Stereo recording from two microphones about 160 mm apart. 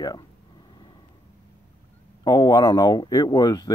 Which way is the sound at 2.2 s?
25° left (ahead or behind).